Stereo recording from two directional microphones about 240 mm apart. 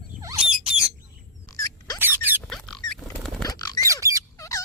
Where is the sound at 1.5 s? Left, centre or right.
Centre.